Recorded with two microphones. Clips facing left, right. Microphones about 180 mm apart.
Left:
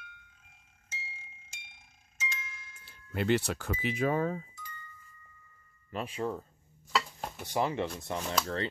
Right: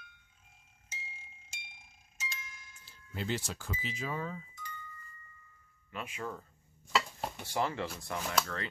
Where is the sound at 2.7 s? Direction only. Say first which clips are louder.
Left 7 dB; 60° left (ahead or behind).